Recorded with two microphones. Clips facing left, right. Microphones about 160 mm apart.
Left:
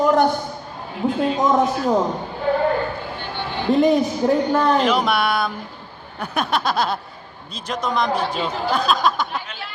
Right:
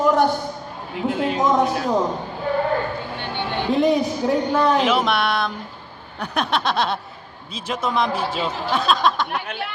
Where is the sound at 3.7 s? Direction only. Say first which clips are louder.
Left 3 dB; centre (ahead or behind).